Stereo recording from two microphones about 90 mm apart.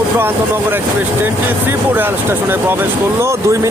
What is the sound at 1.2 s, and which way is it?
Speech, 25° right (ahead or behind).